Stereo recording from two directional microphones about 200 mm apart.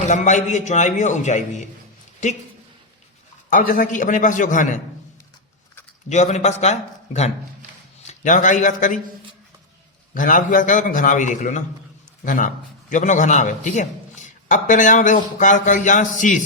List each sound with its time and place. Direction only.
0.1 s a man's voice: 35° left (ahead or behind)
3.5 s a man's voice: 45° left (ahead or behind)
6.1 s a man's voice: 35° left (ahead or behind)
10.2 s a man's voice: 40° left (ahead or behind)